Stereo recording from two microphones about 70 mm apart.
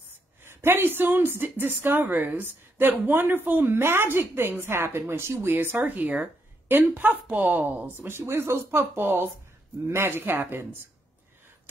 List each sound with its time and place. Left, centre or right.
0.4 s a woman's voice: right